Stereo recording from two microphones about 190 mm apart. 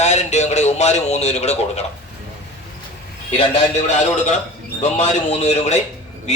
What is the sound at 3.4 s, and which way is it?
A man's voice, 35° left (ahead or behind).